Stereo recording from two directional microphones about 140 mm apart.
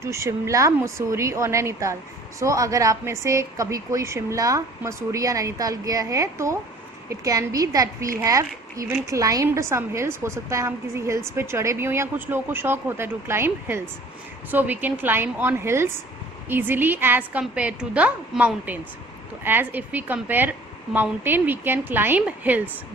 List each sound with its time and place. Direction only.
0.0 s a woman's voice: 20° right (ahead or behind)